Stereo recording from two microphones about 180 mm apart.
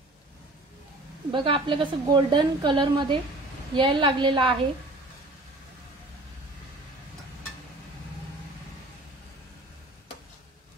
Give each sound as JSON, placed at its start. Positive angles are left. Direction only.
{"t": 1.3, "sound": "a woman's voice", "side_deg": -30}